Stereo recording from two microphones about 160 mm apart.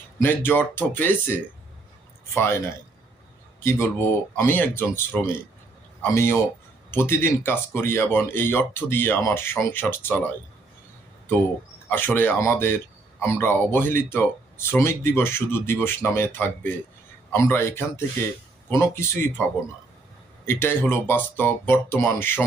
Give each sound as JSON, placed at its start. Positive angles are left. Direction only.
{"t": 0.2, "sound": "speech", "side_deg": 15}
{"t": 6.0, "sound": "a man's voice", "side_deg": 15}
{"t": 11.9, "sound": "speech", "side_deg": 15}
{"t": 20.5, "sound": "speech", "side_deg": 15}